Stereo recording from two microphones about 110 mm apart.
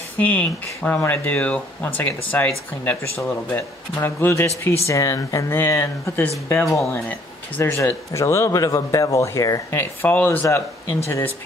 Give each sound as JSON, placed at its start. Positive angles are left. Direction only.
{"t": 0.2, "sound": "speech", "side_deg": 15}
{"t": 9.8, "sound": "speech", "side_deg": 15}